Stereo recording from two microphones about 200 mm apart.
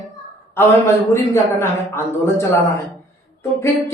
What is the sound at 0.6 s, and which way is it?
A man's voice, 10° left (ahead or behind).